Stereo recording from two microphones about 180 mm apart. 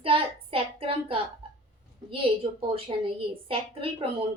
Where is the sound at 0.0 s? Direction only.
30° right (ahead or behind).